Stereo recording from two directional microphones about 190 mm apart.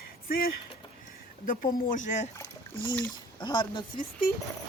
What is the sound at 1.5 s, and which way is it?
Speech, 45° left (ahead or behind).